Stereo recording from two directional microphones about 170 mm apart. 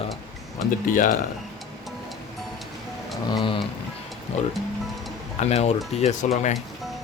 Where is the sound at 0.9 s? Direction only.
50° left (ahead or behind).